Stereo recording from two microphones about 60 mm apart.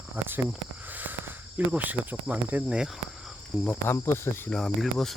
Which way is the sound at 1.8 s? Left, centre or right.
Right.